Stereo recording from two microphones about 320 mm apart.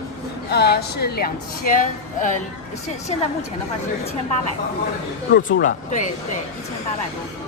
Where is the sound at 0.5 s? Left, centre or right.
Left.